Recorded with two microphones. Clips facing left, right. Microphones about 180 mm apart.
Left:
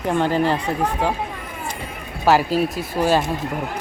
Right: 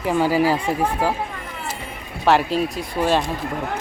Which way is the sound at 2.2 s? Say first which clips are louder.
Left 1 dB; centre (ahead or behind).